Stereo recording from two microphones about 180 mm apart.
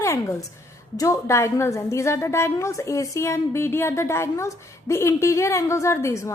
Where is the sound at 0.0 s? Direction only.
15° left (ahead or behind).